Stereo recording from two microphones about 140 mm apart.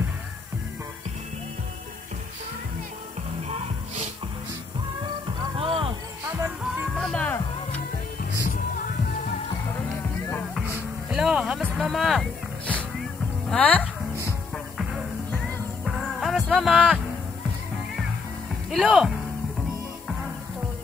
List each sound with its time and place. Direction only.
3.4 s music: 55° right (ahead or behind)
5.6 s music: 40° right (ahead or behind)
7.0 s music: 5° left (ahead or behind)
8.2 s music: 75° left (ahead or behind)
11.1 s music: 5° right (ahead or behind)
13.5 s speech: 10° left (ahead or behind)
15.3 s music: centre (ahead or behind)
18.7 s speech: centre (ahead or behind)